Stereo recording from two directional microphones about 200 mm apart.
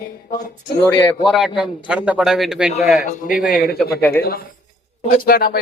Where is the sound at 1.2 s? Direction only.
Centre (ahead or behind).